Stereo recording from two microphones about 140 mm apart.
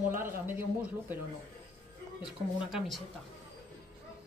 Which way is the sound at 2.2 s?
5° right (ahead or behind).